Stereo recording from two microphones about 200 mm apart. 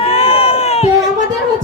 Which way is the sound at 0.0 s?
30° left (ahead or behind).